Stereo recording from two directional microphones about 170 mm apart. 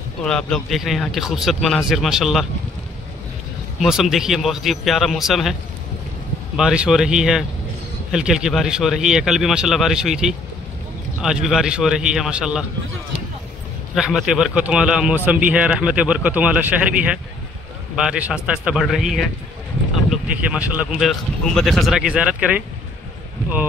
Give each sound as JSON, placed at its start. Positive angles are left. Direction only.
{"t": 0.2, "sound": "speech", "side_deg": 5}
{"t": 3.8, "sound": "speech", "side_deg": 0}
{"t": 13.9, "sound": "a man's voice", "side_deg": -5}